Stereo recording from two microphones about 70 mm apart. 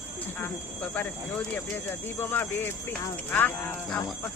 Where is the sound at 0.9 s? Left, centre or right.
Left.